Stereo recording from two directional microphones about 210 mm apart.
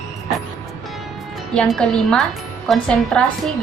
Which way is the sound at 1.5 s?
5° left (ahead or behind).